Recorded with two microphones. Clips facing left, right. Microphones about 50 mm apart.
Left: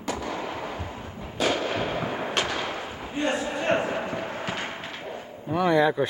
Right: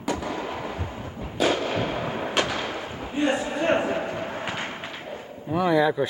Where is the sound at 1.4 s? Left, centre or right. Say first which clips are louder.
Right 2 dB; centre.